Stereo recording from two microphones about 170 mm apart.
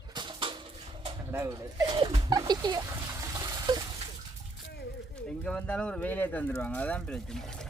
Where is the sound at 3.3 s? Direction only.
20° right (ahead or behind).